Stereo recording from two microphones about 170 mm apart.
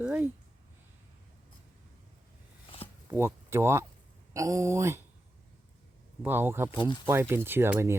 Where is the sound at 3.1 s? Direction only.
15° right (ahead or behind).